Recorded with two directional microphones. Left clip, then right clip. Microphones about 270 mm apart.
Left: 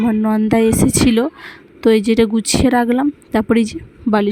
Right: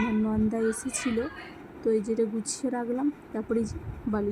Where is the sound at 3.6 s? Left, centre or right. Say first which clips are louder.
Left 12 dB; left.